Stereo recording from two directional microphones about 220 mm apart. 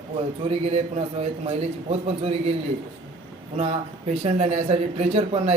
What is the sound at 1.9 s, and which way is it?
Speech, 25° right (ahead or behind).